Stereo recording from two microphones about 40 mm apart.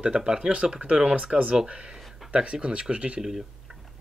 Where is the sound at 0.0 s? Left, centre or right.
Right.